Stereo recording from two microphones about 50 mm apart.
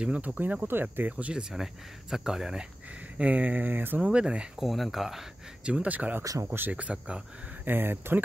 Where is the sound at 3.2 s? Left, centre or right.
Right.